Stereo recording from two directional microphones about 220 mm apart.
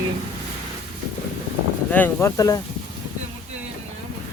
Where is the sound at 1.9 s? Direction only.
10° left (ahead or behind).